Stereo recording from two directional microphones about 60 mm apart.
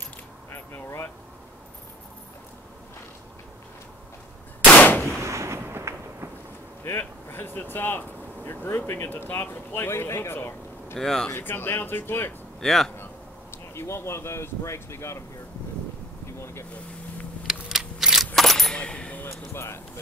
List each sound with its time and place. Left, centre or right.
0.5 s a sound: left
4.7 s gunshot: left
5.2 s artillery fire: right
7.0 s speech: left
11.0 s speech: centre
11.3 s speech: left
12.5 s speech: centre
12.9 s speech: left
16.3 s vehicle: left
17.5 s keys jangling: centre
18.8 s a sound: centre
19.2 s music: left